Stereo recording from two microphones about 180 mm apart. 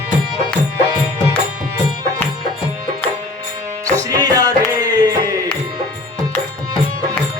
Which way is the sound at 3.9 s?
20° right (ahead or behind).